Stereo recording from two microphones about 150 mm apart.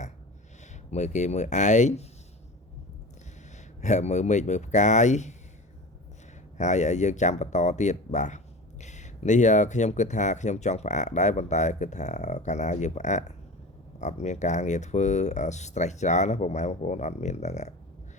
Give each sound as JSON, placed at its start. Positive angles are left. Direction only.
{"t": 0.9, "sound": "speech", "side_deg": 50}
{"t": 3.8, "sound": "speech", "side_deg": 50}
{"t": 6.6, "sound": "speech", "side_deg": 50}